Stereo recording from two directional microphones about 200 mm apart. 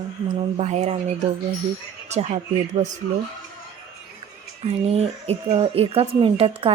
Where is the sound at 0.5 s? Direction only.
35° right (ahead or behind).